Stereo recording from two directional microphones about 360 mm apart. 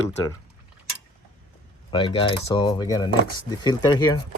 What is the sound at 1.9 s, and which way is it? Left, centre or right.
Speech, centre.